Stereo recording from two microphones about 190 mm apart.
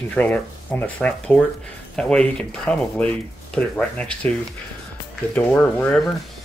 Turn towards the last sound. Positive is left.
turn(degrees=5)  # may be behind; listen again after turning